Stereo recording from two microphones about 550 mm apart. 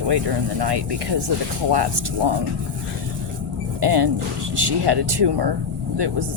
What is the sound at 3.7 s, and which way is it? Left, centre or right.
Speech, right.